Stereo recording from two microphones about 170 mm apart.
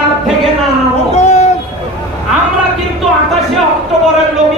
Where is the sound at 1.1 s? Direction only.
40° left (ahead or behind).